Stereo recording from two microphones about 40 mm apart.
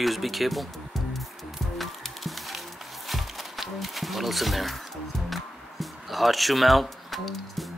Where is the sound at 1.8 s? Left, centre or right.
Centre.